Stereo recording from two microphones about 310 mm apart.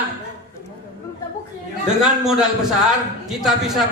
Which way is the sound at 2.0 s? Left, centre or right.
Centre.